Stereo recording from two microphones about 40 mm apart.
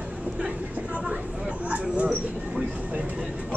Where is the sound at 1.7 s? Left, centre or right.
Right.